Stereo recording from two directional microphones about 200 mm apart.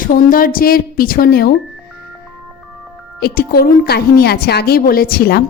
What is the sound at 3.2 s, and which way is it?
A woman's voice, 50° left (ahead or behind).